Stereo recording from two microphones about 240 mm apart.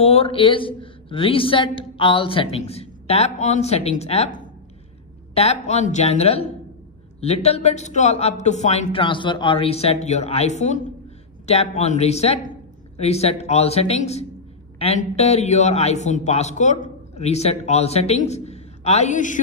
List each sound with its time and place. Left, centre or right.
0.0 s a man's voice: left